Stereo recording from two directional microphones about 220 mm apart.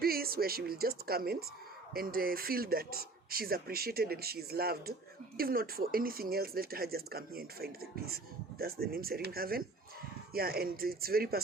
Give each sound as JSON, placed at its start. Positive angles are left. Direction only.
{"t": 0.0, "sound": "speech", "side_deg": -45}